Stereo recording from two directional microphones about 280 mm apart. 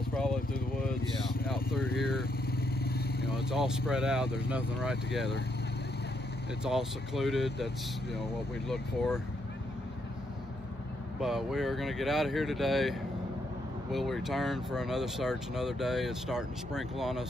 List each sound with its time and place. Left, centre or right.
1.5 s speech: centre
2.8 s vehicle: left
3.3 s speech: centre
6.6 s speech: centre
11.1 s speech: centre
13.9 s speech: centre